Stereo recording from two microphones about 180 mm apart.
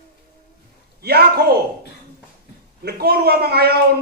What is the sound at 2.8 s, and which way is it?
Speech, 60° right (ahead or behind).